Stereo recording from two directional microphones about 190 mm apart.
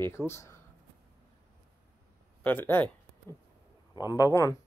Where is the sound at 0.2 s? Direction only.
Centre (ahead or behind).